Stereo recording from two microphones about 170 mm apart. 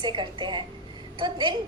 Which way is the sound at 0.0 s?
25° right (ahead or behind).